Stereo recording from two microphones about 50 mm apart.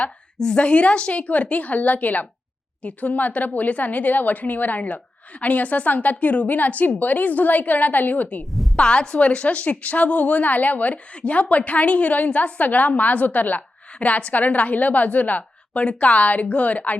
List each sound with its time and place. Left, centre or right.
0.3 s a woman's voice: centre; by 8.4 s left
8.7 s a woman's voice: left